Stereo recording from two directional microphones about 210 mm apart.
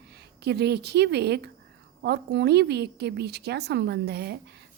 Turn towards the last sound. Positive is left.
turn(degrees=-50)  # may be behind; listen again after turning